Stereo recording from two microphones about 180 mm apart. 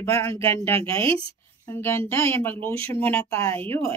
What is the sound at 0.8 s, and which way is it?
Speech, 30° right (ahead or behind).